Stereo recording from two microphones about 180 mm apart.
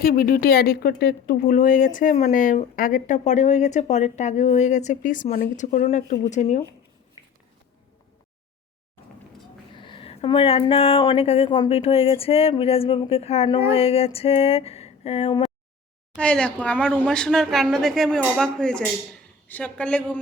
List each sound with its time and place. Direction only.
0.0 s speech: 55° left (ahead or behind)
9.7 s a sound: 25° left (ahead or behind)
11.0 s speech: 30° left (ahead or behind)
16.1 s a woman's voice: 5° left (ahead or behind)